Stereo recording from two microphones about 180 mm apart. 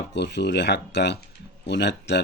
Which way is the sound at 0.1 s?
70° left (ahead or behind).